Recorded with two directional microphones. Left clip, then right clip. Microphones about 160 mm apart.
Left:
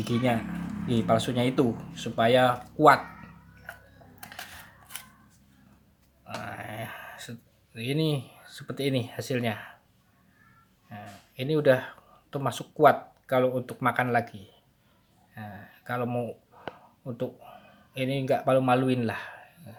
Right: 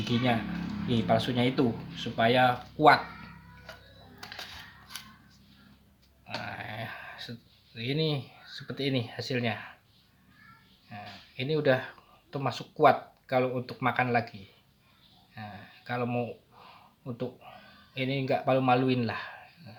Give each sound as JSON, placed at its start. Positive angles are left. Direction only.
{"t": 0.0, "sound": "speech", "side_deg": 40}
{"t": 6.4, "sound": "a sound", "side_deg": 40}
{"t": 10.8, "sound": "speech", "side_deg": 40}
{"t": 15.4, "sound": "speech", "side_deg": 35}